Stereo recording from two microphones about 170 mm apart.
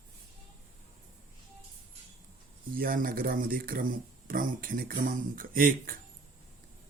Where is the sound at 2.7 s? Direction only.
55° right (ahead or behind).